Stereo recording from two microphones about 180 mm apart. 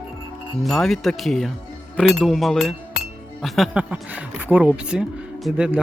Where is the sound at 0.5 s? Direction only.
Centre (ahead or behind).